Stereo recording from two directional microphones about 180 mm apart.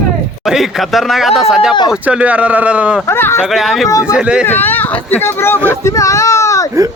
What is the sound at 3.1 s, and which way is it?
Speech, 15° left (ahead or behind).